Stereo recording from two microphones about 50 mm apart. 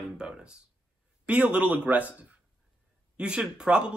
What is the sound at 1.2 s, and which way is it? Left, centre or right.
Speech, right.